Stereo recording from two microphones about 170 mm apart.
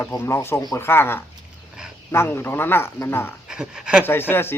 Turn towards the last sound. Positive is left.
turn(degrees=10)  # may be behind; listen again after turning